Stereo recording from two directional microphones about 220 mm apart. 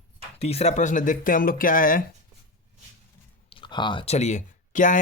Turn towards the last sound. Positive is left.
turn(degrees=35)  # may be behind; listen again after turning